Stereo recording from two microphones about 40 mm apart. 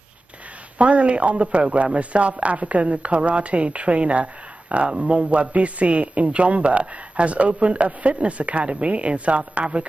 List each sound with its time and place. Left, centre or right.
0.7 s speech: right